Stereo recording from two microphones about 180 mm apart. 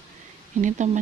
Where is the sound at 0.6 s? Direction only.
45° right (ahead or behind).